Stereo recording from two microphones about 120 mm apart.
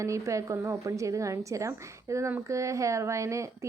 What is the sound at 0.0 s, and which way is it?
Speech, 25° right (ahead or behind).